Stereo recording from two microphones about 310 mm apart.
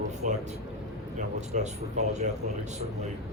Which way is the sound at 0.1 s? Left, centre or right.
Right.